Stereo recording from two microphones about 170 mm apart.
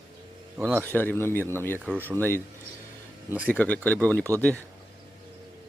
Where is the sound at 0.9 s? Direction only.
10° left (ahead or behind).